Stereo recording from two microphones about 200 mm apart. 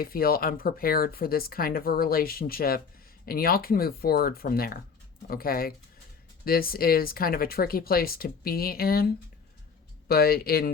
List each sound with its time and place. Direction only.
0.0 s speech: 50° left (ahead or behind)